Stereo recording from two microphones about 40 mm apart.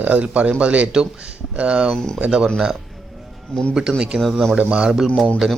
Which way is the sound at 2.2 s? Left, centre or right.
Right.